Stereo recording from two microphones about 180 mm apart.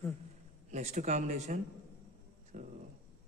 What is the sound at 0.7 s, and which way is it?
A man's voice, 40° right (ahead or behind).